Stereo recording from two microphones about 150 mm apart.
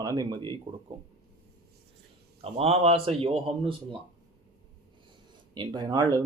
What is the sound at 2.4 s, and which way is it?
A man's voice, 40° right (ahead or behind).